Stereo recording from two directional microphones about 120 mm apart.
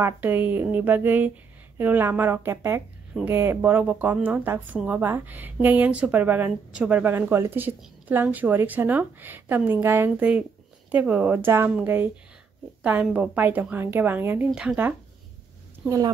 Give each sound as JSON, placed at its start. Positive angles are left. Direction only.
{"t": 0.0, "sound": "a woman's voice", "side_deg": -15}